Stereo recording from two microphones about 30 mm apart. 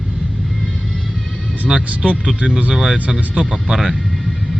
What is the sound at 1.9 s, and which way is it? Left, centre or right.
Speech, right.